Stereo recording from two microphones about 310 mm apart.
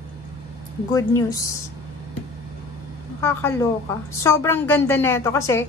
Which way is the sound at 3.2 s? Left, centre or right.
Centre.